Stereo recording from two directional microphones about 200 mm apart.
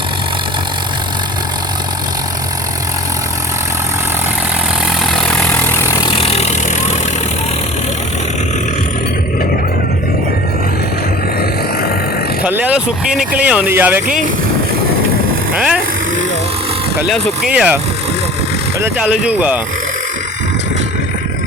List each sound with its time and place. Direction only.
5.1 s vehicle: 5° left (ahead or behind); by 6.9 s 30° left (ahead or behind)
12.5 s speech: 10° right (ahead or behind)
15.5 s vehicle: 5° right (ahead or behind)
17.0 s speech: centre (ahead or behind)
18.8 s speech: 5° right (ahead or behind)